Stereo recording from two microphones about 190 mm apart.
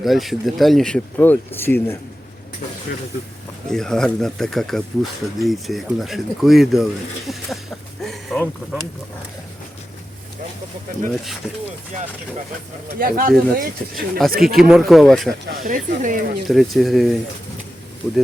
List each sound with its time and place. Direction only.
0.0 s speech: centre (ahead or behind)
3.7 s speech: 5° left (ahead or behind)
8.0 s speech: centre (ahead or behind)
13.0 s speech: 50° right (ahead or behind)
14.4 s speech: centre (ahead or behind)
15.5 s speech: 45° right (ahead or behind)
16.5 s speech: centre (ahead or behind)